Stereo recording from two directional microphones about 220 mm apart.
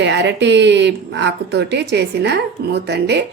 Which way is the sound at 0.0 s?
50° right (ahead or behind).